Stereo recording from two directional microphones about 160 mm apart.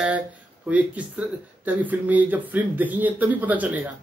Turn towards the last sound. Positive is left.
turn(degrees=-10)  # may be behind; listen again after turning